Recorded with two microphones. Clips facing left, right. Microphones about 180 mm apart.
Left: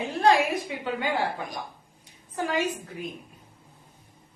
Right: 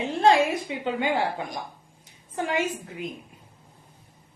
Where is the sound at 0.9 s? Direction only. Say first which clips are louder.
Right 2 dB; 25° right (ahead or behind).